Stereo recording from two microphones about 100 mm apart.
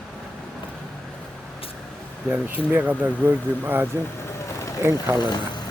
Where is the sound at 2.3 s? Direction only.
15° right (ahead or behind).